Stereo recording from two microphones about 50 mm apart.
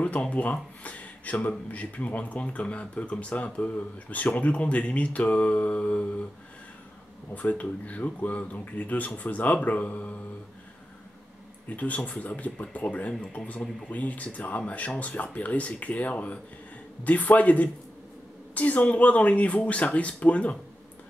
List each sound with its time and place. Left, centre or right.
0.0 s speech: left
7.3 s speech: left
11.7 s speech: left